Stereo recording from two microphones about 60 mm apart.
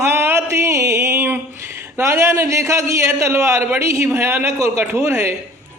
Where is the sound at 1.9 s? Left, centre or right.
Right.